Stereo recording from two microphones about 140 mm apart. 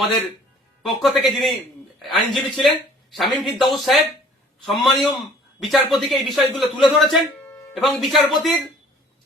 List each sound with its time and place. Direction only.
0.8 s speech: centre (ahead or behind)